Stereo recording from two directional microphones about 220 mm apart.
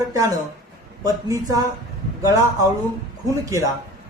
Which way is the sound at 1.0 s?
15° right (ahead or behind).